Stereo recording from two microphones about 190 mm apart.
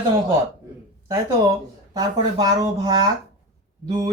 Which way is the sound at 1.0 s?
15° right (ahead or behind).